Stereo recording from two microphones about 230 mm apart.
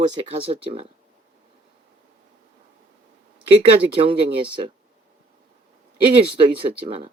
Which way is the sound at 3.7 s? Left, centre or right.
Right.